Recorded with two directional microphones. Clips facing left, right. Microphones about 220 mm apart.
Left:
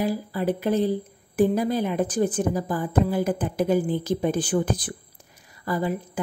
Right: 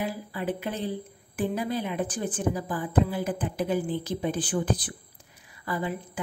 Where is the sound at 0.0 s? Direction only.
40° left (ahead or behind).